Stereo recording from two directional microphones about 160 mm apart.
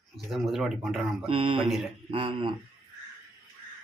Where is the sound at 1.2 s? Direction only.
35° right (ahead or behind).